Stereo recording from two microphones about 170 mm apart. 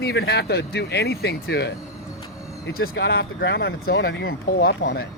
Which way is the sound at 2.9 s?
85° left.